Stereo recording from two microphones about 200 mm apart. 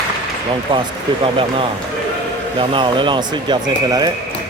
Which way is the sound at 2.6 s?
25° right (ahead or behind).